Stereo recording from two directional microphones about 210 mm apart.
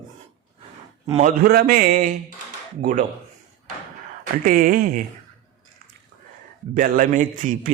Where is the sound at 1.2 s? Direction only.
40° right (ahead or behind).